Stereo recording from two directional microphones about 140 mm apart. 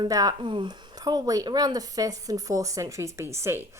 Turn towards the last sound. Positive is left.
turn(degrees=-20)  # may be behind; listen again after turning